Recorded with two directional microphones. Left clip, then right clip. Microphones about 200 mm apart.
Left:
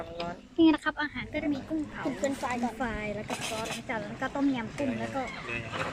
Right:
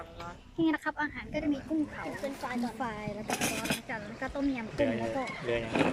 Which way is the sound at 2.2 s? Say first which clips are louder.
Left 8 dB; 15° left (ahead or behind).